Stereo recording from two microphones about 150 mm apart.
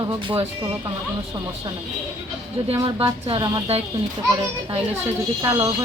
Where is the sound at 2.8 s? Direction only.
35° right (ahead or behind).